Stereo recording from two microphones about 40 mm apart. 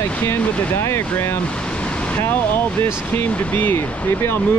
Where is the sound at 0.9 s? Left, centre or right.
Left.